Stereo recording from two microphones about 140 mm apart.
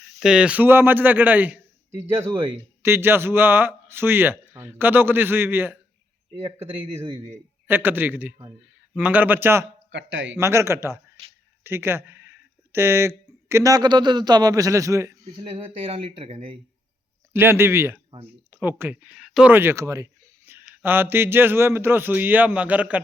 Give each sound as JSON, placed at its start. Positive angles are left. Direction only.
{"t": 0.2, "sound": "speech", "side_deg": -5}
{"t": 6.6, "sound": "speech", "side_deg": -40}
{"t": 7.7, "sound": "speech", "side_deg": -15}
{"t": 15.4, "sound": "speech", "side_deg": -40}
{"t": 17.3, "sound": "speech", "side_deg": -15}